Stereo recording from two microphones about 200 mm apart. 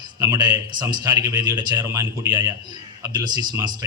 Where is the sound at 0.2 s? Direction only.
20° right (ahead or behind).